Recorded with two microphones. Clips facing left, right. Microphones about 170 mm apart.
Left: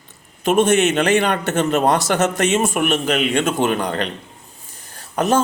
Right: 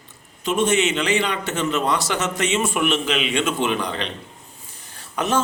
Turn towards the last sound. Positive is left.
turn(degrees=40)  # may be behind; listen again after turning